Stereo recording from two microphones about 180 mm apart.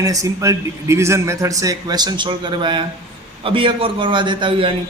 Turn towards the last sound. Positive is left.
turn(degrees=-30)  # may be behind; listen again after turning